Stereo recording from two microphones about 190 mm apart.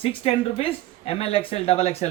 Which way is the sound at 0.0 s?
30° left (ahead or behind).